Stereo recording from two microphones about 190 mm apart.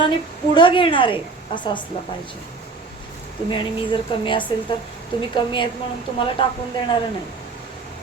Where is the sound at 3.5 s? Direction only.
25° left (ahead or behind).